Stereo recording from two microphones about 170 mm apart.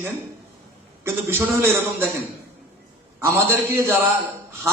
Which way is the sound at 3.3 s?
15° right (ahead or behind).